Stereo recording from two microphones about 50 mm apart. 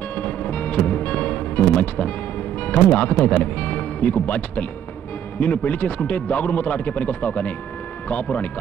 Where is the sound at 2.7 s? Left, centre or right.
Left.